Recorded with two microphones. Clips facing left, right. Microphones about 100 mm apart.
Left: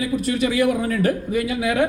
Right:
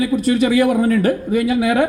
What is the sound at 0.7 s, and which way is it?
Speech, 45° right (ahead or behind).